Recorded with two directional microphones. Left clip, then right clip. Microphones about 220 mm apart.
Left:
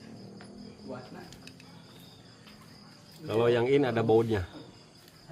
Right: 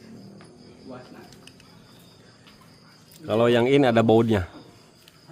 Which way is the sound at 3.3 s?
50° right (ahead or behind).